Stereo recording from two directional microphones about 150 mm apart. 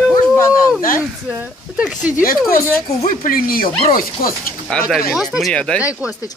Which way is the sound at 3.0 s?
70° left (ahead or behind).